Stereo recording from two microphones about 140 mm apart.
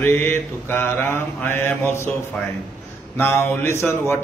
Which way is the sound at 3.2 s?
20° left (ahead or behind).